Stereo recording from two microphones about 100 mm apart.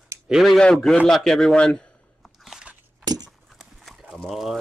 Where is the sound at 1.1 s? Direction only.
5° left (ahead or behind).